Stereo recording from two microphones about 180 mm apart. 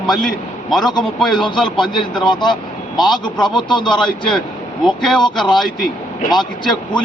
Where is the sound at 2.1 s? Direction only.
25° left (ahead or behind).